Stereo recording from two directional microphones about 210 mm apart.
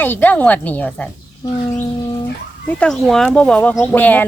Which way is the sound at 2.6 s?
5° left (ahead or behind).